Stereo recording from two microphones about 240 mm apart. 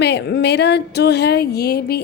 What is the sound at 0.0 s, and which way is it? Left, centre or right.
A woman's voice, left.